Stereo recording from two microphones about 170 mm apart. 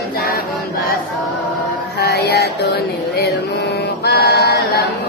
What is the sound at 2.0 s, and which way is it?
Music, 70° left (ahead or behind).